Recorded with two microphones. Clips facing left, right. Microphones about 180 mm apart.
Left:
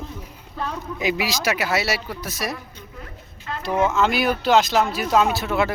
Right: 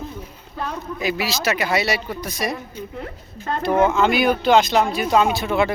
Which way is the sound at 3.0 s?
40° right (ahead or behind).